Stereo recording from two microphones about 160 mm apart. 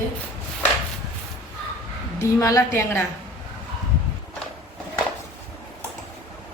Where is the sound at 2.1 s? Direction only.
20° left (ahead or behind).